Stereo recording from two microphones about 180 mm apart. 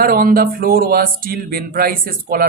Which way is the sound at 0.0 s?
55° right (ahead or behind).